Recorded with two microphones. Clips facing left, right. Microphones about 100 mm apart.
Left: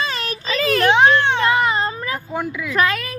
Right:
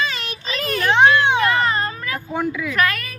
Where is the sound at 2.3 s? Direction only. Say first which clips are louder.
Right 5 dB; centre (ahead or behind).